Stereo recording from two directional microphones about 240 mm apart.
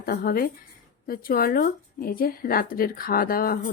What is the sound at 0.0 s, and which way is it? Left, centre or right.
A woman's voice, left.